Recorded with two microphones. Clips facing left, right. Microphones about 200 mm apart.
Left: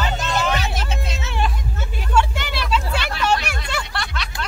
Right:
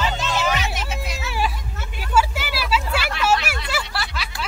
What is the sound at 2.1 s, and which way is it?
Vehicle, 5° right (ahead or behind).